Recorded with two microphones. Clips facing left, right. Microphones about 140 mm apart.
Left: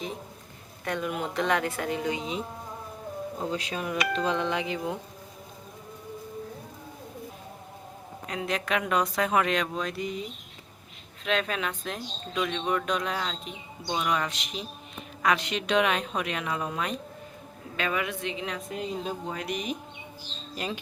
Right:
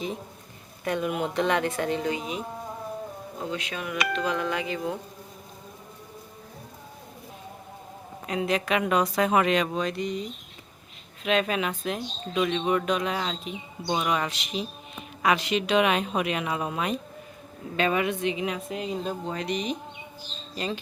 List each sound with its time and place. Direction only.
0.9 s speech: 5° right (ahead or behind); by 2.2 s 15° left (ahead or behind)
3.5 s speech: 35° left (ahead or behind); by 4.9 s 20° left (ahead or behind)
8.3 s speech: 5° right (ahead or behind)
11.2 s speech: 5° right (ahead or behind)
17.7 s speech: 25° right (ahead or behind); by 18.9 s 5° right (ahead or behind)
19.0 s speech: 5° left (ahead or behind)